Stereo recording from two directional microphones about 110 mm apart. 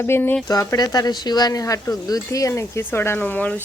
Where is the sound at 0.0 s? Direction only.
20° left (ahead or behind).